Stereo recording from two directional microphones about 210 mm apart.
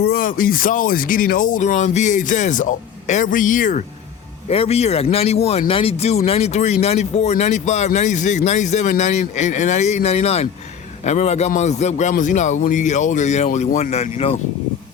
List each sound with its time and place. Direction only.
0.0 s speech: 45° left (ahead or behind)